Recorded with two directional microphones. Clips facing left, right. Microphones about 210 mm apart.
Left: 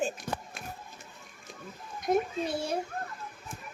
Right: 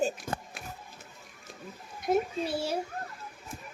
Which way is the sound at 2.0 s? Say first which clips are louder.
Even; 5° right (ahead or behind).